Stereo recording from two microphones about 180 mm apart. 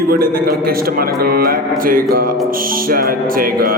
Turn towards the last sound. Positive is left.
turn(degrees=-55)  # may be behind; listen again after turning